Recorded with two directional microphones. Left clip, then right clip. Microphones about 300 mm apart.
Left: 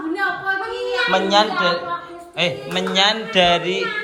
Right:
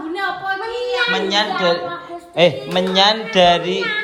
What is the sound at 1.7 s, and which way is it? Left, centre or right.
Speech, centre.